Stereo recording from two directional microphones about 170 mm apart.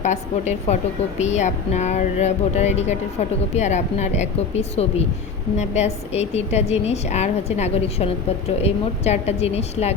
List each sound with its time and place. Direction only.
0.0 s a woman's voice: 45° left (ahead or behind)